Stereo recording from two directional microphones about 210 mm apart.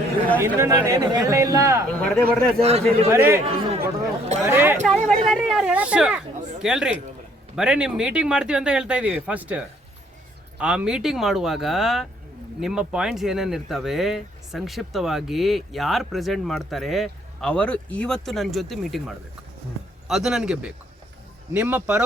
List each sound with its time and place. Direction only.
0.3 s speech: 10° right (ahead or behind)
1.9 s speech: 5° left (ahead or behind)
2.6 s a man's voice: 30° right (ahead or behind)
3.1 s speech: 10° right (ahead or behind)
3.4 s chatter: 30° right (ahead or behind)
4.4 s a sound: 10° right (ahead or behind)
5.0 s speech: centre (ahead or behind)